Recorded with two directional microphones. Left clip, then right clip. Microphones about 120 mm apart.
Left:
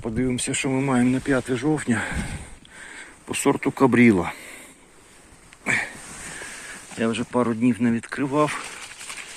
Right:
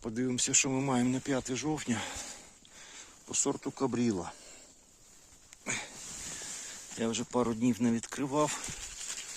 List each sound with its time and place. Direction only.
0.0 s speech: 60° right (ahead or behind); by 2.1 s 30° right (ahead or behind)
3.2 s speech: 15° right (ahead or behind)
3.5 s speech: centre (ahead or behind)
5.6 s a sound: 15° right (ahead or behind)
7.0 s speech: 50° right (ahead or behind)